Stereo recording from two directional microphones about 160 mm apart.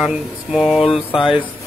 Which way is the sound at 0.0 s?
5° right (ahead or behind).